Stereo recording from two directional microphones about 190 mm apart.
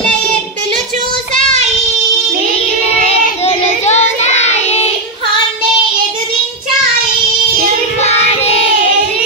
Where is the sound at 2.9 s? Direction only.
35° left (ahead or behind).